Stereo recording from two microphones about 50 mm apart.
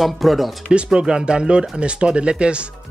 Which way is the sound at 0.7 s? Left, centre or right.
Centre.